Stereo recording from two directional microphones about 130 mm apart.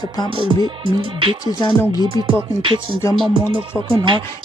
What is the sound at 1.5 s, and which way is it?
Speech, 35° left (ahead or behind).